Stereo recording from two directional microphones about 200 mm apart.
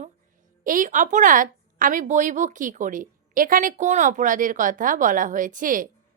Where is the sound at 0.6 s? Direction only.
40° right (ahead or behind).